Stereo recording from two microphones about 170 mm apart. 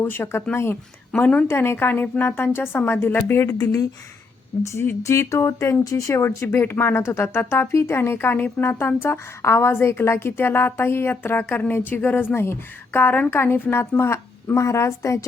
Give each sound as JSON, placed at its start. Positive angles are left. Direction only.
{"t": 0.0, "sound": "speech", "side_deg": 15}